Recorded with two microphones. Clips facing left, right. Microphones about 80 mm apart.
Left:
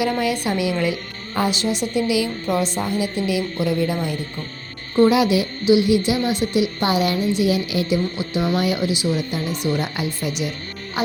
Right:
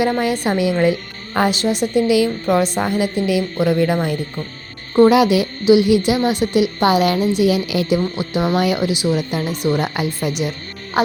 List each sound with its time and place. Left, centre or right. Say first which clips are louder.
0.0 s a woman's voice: right 3 dB; right
11.0 s music: right 6 dB; right